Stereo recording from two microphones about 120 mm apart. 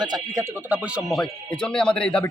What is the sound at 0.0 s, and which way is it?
Speech, 35° right (ahead or behind).